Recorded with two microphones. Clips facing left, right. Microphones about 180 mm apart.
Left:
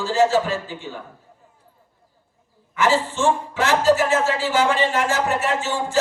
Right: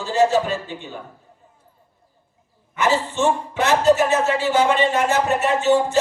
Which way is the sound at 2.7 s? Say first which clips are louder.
Even; 20° right (ahead or behind).